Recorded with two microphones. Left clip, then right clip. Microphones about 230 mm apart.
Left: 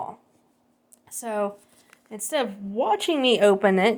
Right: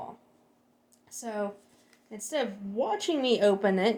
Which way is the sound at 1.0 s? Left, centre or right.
Left.